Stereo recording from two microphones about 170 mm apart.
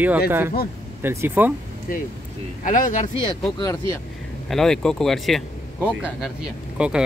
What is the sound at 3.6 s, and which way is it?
Speech, 20° left (ahead or behind).